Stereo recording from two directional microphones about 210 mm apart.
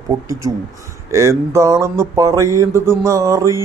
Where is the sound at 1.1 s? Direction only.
15° right (ahead or behind).